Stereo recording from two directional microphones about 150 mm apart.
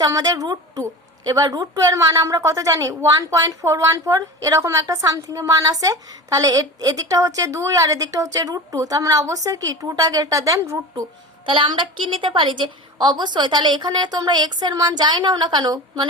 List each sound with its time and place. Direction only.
0.0 s a woman's voice: 25° right (ahead or behind)
11.4 s a woman's voice: 35° right (ahead or behind)